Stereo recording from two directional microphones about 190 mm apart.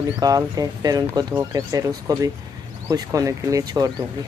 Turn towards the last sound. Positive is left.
turn(degrees=-20)  # may be behind; listen again after turning